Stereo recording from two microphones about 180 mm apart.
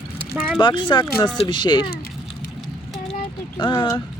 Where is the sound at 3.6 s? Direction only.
25° left (ahead or behind).